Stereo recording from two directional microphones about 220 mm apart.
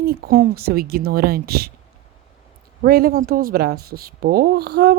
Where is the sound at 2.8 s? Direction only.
45° right (ahead or behind).